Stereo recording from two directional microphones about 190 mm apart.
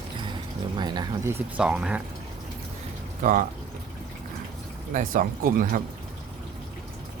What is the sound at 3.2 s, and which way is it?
Speech, 45° right (ahead or behind).